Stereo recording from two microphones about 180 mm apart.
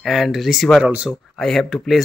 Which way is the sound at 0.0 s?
Centre (ahead or behind).